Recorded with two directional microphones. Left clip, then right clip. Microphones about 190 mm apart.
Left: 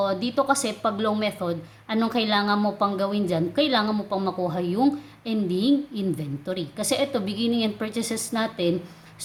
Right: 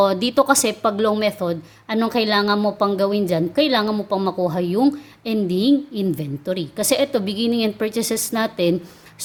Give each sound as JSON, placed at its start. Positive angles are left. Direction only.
{"t": 0.0, "sound": "speech", "side_deg": -40}